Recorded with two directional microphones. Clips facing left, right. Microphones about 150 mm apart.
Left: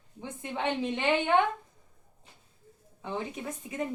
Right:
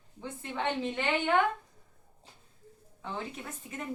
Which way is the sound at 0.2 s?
20° left (ahead or behind).